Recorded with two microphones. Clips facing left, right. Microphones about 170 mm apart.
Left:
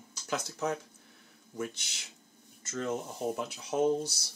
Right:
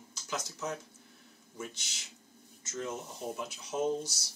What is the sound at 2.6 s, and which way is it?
Speech, 60° left (ahead or behind).